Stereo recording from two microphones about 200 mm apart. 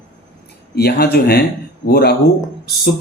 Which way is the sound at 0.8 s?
55° left (ahead or behind).